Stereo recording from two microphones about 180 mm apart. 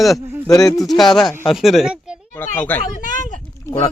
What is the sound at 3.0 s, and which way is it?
Speech, 45° left (ahead or behind).